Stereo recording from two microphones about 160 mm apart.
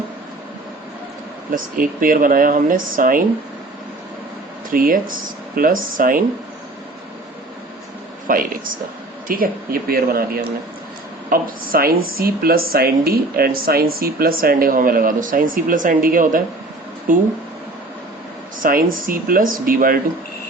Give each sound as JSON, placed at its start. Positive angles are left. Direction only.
{"t": 1.5, "sound": "speech", "side_deg": -60}
{"t": 4.7, "sound": "speech", "side_deg": -65}
{"t": 8.3, "sound": "speech", "side_deg": -60}
{"t": 18.6, "sound": "speech", "side_deg": -60}